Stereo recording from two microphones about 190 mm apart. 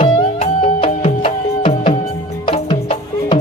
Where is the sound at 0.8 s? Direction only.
30° left (ahead or behind).